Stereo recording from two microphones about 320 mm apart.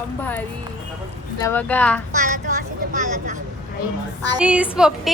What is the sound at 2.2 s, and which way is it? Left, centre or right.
A woman's voice, right.